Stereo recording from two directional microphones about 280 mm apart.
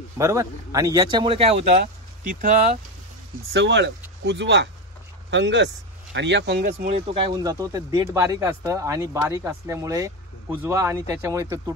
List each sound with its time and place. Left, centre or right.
0.2 s speech: centre
3.5 s speech: right
6.9 s speech: right